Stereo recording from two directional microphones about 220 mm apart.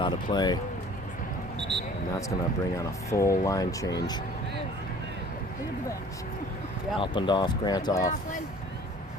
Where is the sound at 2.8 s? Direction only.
15° left (ahead or behind).